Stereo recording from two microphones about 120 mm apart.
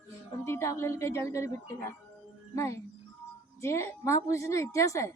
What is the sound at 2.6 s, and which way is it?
A woman's voice, 25° left (ahead or behind).